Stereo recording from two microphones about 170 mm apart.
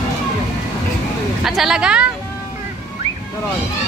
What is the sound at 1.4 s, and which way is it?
Speech, centre (ahead or behind).